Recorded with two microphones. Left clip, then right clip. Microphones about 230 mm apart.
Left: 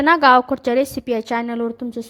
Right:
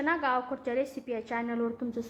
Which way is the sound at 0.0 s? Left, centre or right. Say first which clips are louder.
Left 16 dB; left.